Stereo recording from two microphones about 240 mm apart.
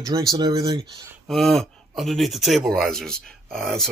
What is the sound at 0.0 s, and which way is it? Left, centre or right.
Speech, centre.